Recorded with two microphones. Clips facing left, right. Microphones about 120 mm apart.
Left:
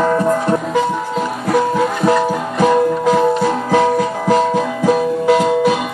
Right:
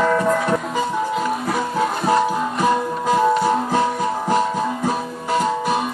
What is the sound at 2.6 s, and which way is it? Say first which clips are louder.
Music: left 9 dB; 90° left.